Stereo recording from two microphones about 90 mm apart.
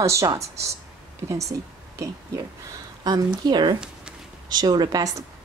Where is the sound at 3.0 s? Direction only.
50° right (ahead or behind).